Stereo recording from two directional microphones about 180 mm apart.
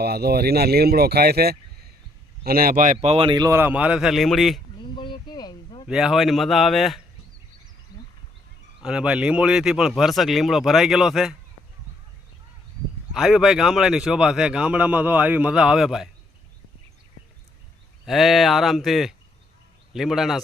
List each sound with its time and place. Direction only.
0.0 s speech: 60° right (ahead or behind); by 4.6 s centre (ahead or behind)
4.9 s a sound: 25° left (ahead or behind)
5.9 s a man's voice: 5° right (ahead or behind)
7.9 s a sound: 20° left (ahead or behind)
8.8 s a man's voice: 5° right (ahead or behind)
13.1 s a man's voice: centre (ahead or behind)
18.0 s a man's voice: centre (ahead or behind)